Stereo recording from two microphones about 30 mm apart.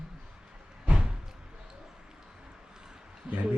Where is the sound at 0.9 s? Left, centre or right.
Right.